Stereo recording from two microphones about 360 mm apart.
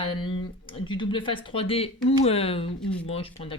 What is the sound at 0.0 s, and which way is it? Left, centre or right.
Speech, centre.